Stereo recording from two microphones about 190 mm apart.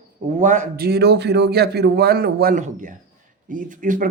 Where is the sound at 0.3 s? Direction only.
40° right (ahead or behind).